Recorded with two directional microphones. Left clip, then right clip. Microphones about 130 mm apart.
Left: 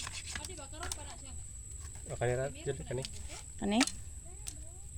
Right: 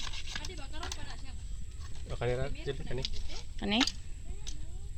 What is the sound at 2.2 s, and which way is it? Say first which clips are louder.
Speech: even; 45° left (ahead or behind).